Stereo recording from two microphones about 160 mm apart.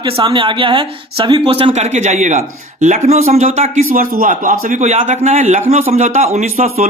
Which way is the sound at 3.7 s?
60° right (ahead or behind).